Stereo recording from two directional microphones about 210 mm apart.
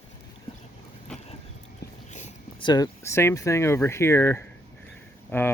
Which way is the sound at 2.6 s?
20° left (ahead or behind).